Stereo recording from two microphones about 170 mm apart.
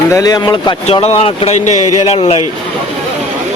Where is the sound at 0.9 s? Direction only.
35° left (ahead or behind).